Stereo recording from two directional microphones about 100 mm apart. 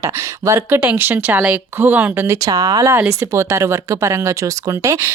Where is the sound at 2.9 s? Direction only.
25° right (ahead or behind).